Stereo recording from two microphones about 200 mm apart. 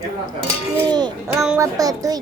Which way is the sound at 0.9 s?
20° right (ahead or behind).